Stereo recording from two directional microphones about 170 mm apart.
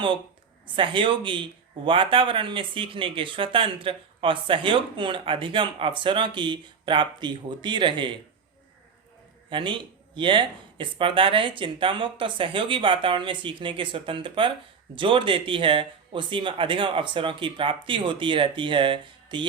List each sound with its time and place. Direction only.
0.8 s speech: 30° right (ahead or behind)
9.5 s speech: 30° right (ahead or behind)